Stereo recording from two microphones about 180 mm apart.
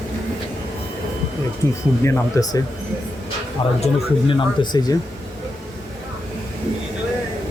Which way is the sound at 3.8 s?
30° left (ahead or behind).